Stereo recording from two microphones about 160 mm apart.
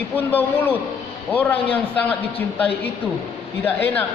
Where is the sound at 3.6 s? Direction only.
15° left (ahead or behind).